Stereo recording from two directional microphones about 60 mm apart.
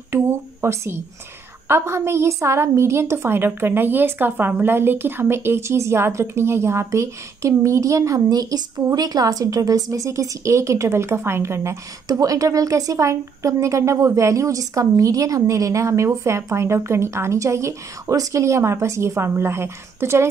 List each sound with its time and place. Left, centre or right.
0.1 s a woman's voice: right
12.1 s a woman's voice: right